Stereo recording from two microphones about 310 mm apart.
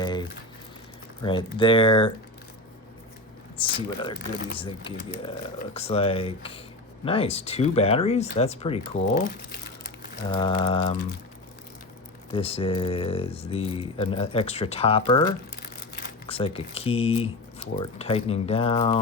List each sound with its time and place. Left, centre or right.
0.0 s crumpling: centre
1.2 s speech: centre
3.6 s speech: centre
10.2 s speech: centre
12.3 s speech: centre
16.3 s speech: centre